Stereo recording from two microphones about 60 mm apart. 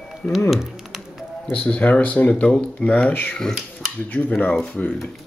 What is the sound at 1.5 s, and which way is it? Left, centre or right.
Speech, left.